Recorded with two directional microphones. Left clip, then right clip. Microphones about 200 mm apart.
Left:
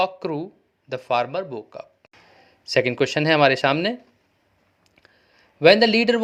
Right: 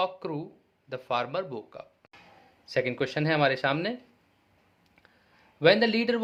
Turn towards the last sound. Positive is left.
turn(degrees=30)  # may be behind; listen again after turning